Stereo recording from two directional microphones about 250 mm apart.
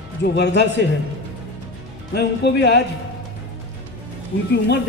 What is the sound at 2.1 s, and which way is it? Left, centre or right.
Speech, left.